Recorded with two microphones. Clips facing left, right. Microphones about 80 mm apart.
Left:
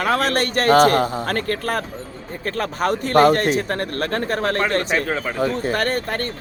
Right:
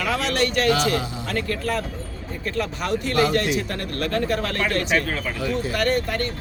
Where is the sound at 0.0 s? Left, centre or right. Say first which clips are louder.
Left 3 dB; left.